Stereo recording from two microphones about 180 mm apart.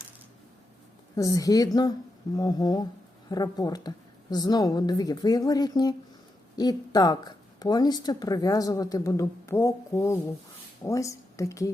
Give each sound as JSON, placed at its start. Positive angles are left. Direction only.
{"t": 1.1, "sound": "speech", "side_deg": 20}